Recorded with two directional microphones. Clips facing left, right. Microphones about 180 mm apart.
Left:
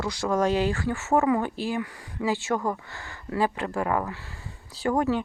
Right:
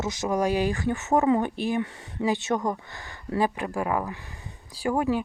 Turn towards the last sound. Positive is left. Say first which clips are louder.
# left 1 dB
turn(degrees=-10)  # may be behind; listen again after turning